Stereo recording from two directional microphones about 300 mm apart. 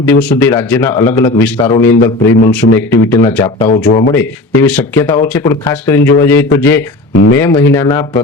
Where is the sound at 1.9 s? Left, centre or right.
Left.